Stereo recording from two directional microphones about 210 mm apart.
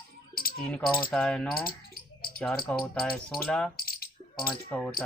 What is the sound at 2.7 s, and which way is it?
Speech, 5° left (ahead or behind).